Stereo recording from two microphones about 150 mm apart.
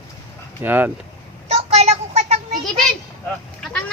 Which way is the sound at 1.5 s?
45° right (ahead or behind).